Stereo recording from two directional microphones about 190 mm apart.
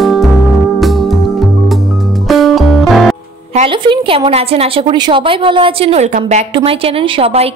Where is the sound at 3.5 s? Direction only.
30° right (ahead or behind).